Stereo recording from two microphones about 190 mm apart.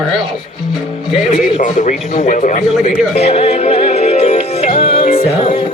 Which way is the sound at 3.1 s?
35° left (ahead or behind).